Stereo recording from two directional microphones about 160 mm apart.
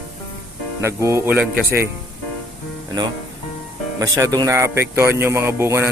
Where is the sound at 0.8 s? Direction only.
15° right (ahead or behind).